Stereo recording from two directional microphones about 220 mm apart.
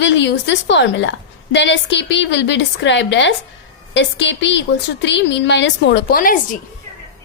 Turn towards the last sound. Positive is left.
turn(degrees=40)  # may be behind; listen again after turning